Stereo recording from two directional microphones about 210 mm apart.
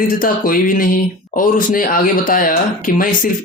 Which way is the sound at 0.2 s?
40° left (ahead or behind).